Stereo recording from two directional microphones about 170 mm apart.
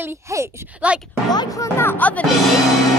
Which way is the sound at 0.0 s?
15° right (ahead or behind).